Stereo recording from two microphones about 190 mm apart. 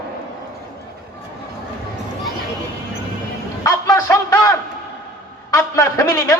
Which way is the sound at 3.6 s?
15° left (ahead or behind).